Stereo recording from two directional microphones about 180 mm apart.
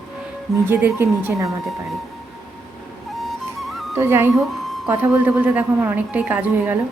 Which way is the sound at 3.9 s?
10° right (ahead or behind).